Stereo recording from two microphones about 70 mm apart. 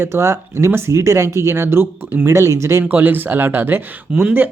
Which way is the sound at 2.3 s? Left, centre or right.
Right.